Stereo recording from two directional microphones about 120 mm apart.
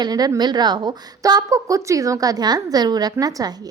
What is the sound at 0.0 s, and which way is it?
A woman's voice, 35° right (ahead or behind).